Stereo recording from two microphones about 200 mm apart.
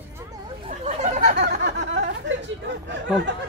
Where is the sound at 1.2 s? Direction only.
50° right (ahead or behind).